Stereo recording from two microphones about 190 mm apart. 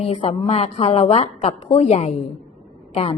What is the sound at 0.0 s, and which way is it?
A woman's voice, 35° left (ahead or behind).